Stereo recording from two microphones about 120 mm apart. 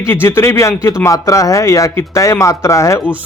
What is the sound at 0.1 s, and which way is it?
Speech, 20° left (ahead or behind).